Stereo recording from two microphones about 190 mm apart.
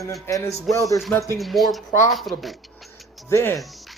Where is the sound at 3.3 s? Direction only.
15° left (ahead or behind).